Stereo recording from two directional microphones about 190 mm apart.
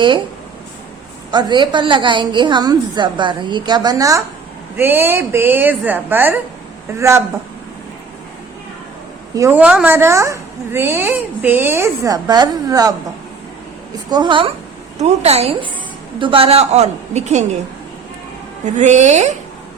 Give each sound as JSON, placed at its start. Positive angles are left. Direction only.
{"t": 1.3, "sound": "a woman's voice", "side_deg": -25}
{"t": 9.3, "sound": "a woman's voice", "side_deg": -15}
{"t": 14.1, "sound": "a woman's voice", "side_deg": -25}
{"t": 18.8, "sound": "a woman's voice", "side_deg": -40}